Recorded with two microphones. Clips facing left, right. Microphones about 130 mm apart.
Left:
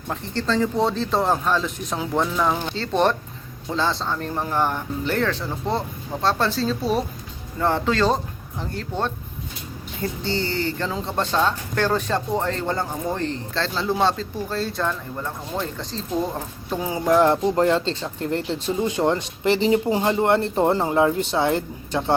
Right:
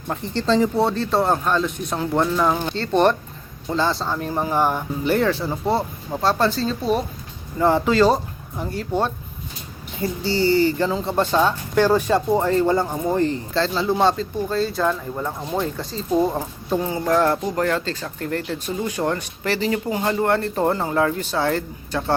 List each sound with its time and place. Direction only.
0.3 s speech: 20° right (ahead or behind)
0.8 s speech: centre (ahead or behind)
7.6 s speech: 10° right (ahead or behind)
16.8 s speech: 15° left (ahead or behind)